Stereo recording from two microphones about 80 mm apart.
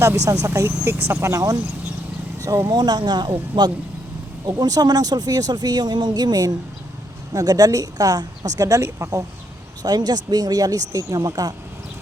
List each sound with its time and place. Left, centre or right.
0.0 s speech: right
2.7 s speech: right
4.4 s speech: right
9.8 s speech: right